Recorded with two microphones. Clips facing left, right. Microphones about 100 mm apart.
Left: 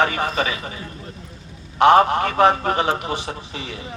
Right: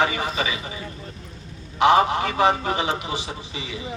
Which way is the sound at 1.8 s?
50° left (ahead or behind).